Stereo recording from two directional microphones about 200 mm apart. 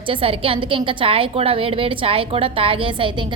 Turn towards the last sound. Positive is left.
turn(degrees=-25)  # may be behind; listen again after turning